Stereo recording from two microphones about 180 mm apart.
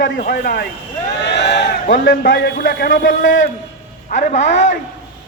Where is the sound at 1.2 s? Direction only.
75° left (ahead or behind).